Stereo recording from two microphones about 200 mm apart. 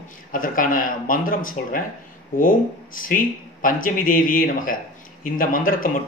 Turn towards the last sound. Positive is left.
turn(degrees=45)  # may be behind; listen again after turning